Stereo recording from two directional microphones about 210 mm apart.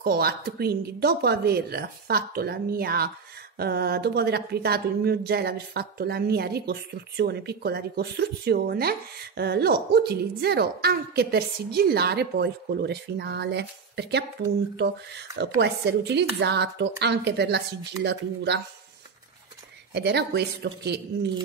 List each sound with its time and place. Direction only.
0.0 s speech: 45° right (ahead or behind)
19.9 s speech: 55° right (ahead or behind)